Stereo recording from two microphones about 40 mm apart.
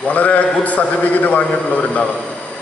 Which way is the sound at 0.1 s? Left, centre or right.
Left.